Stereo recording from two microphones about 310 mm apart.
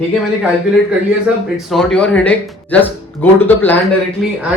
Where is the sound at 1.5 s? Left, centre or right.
Centre.